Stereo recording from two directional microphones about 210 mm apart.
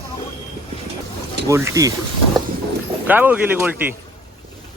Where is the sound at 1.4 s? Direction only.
15° right (ahead or behind).